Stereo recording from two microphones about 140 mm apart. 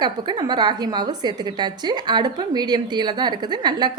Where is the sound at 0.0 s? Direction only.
30° right (ahead or behind).